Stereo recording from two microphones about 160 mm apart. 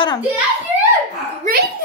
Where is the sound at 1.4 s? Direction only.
70° right (ahead or behind).